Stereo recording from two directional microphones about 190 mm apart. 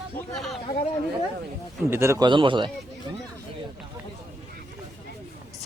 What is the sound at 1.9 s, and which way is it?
Speech, 15° right (ahead or behind).